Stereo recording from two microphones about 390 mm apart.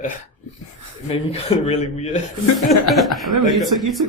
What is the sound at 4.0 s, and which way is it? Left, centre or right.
Speech, right.